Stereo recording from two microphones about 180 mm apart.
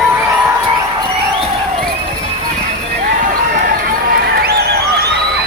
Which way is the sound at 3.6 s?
55° right (ahead or behind).